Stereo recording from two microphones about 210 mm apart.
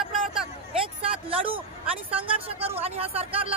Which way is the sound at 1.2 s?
25° right (ahead or behind).